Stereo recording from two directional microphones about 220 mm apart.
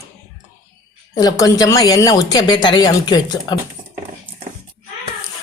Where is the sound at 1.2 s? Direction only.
15° left (ahead or behind).